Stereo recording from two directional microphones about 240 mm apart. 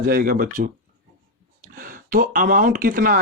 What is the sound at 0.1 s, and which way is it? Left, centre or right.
Speech, right.